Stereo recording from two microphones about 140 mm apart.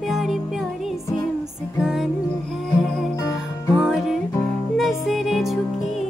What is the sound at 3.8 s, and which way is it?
Music, centre (ahead or behind).